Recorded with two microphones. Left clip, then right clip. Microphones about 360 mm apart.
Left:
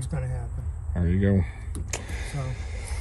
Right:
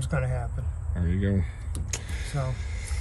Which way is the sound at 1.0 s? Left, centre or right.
Centre.